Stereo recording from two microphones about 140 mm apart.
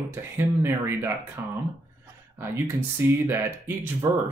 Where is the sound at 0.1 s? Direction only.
15° right (ahead or behind).